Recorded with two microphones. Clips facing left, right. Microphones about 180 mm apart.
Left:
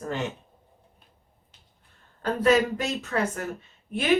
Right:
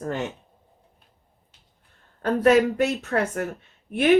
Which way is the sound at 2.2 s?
60° right (ahead or behind).